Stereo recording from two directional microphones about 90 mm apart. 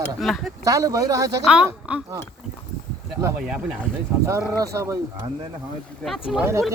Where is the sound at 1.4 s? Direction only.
10° right (ahead or behind).